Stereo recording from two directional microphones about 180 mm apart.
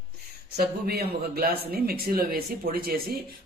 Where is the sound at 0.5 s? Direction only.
60° right (ahead or behind).